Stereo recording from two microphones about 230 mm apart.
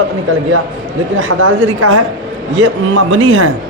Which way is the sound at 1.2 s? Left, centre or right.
Right.